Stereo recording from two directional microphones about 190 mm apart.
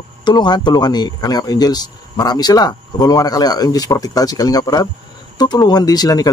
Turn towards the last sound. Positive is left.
turn(degrees=20)  # may be behind; listen again after turning